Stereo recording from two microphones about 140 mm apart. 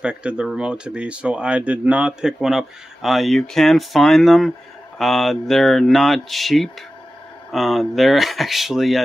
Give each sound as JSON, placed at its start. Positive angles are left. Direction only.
{"t": 0.0, "sound": "speech", "side_deg": -5}